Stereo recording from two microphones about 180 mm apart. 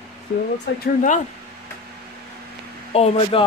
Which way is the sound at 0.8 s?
45° left (ahead or behind).